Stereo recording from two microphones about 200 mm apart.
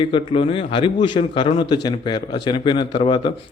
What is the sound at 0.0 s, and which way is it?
A man's voice, 25° left (ahead or behind).